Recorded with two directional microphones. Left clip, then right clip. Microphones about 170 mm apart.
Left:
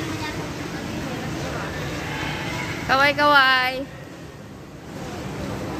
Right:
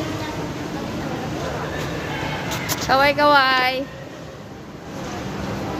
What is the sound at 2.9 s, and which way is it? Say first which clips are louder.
Speech: right 2 dB; centre (ahead or behind).